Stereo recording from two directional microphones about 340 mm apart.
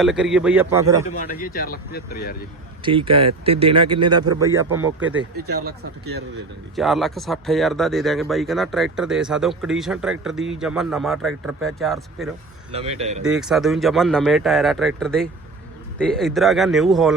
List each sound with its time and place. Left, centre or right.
0.0 s speech: centre
1.2 s speech: left
2.8 s speech: centre
5.6 s speech: right
6.7 s speech: centre
12.7 s speech: centre
13.2 s speech: centre